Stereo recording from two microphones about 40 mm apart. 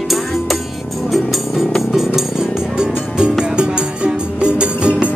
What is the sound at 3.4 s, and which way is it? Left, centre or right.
Music, right.